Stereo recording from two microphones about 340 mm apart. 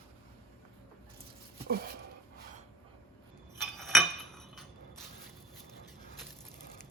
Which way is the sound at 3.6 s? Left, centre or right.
Centre.